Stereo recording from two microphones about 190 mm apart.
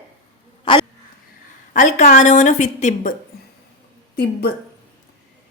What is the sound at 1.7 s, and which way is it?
Speech, 40° left (ahead or behind).